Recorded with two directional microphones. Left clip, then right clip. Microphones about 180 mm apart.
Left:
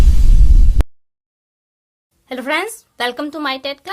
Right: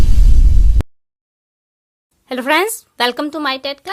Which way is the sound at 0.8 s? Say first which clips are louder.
Left 2 dB; centre (ahead or behind).